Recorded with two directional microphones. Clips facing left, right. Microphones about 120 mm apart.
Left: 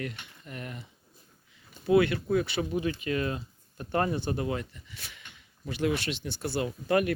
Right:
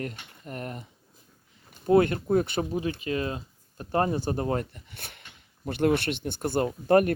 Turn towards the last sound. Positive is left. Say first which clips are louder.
# right 5 dB
turn(degrees=-45)  # may be behind; listen again after turning